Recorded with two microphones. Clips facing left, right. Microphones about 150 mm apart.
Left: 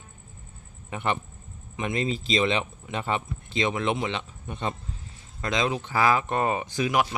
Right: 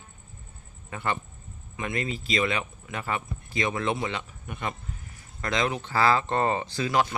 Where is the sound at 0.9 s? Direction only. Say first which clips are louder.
Left 2 dB; 20° left (ahead or behind).